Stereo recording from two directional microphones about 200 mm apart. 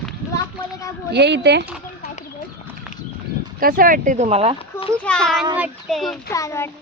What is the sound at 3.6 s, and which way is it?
Speech, 45° right (ahead or behind).